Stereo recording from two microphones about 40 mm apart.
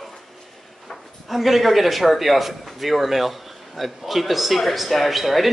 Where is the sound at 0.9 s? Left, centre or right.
Centre.